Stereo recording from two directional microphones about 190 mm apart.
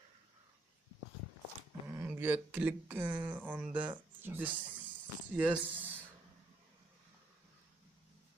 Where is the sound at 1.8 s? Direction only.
10° right (ahead or behind).